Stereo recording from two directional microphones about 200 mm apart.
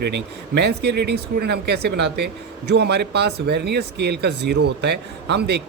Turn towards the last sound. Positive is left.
turn(degrees=-55)  # may be behind; listen again after turning